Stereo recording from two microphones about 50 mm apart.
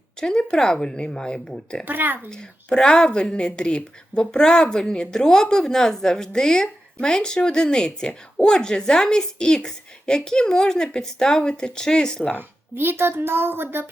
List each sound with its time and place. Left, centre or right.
0.2 s a woman's voice: centre
1.8 s a woman's voice: right
2.3 s a woman's voice: centre
12.4 s a woman's voice: right